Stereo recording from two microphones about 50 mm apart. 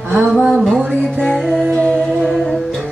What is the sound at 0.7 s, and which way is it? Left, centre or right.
Music, centre.